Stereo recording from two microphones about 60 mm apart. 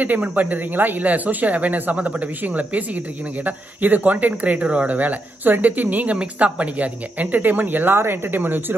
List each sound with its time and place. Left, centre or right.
0.0 s speech: right